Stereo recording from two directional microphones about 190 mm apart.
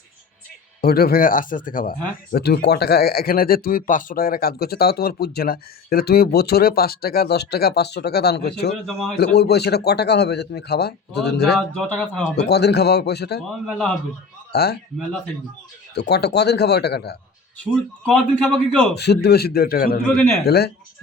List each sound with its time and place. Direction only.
0.8 s a man's voice: 50° left (ahead or behind)
2.3 s speech: 60° left (ahead or behind)
11.5 s speech: 5° left (ahead or behind)
12.4 s speech: 60° left (ahead or behind)
13.5 s speech: centre (ahead or behind)
14.5 s speech: 55° left (ahead or behind)
14.9 s speech: 5° left (ahead or behind)
16.0 s speech: 60° left (ahead or behind)
17.6 s speech: 5° left (ahead or behind)
18.9 s speech: 60° left (ahead or behind)